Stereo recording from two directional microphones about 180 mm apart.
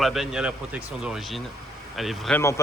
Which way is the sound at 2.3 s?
15° left (ahead or behind).